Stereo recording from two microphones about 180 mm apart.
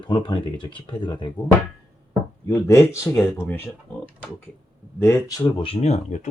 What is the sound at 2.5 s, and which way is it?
Speech, 15° left (ahead or behind).